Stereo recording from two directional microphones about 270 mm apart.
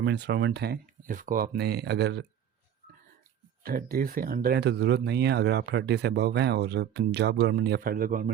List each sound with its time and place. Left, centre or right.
0.0 s speech: right
3.6 s speech: right